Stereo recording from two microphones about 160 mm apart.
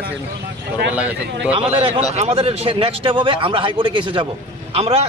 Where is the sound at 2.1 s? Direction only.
40° right (ahead or behind).